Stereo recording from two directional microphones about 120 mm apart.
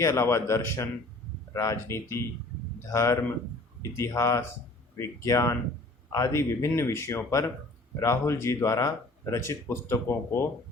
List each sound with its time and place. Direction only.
0.0 s speech: 20° left (ahead or behind)